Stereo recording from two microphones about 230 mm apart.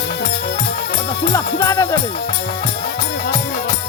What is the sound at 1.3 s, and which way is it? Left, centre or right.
Music, centre.